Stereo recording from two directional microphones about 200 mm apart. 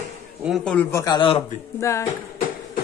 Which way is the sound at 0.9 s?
20° left (ahead or behind).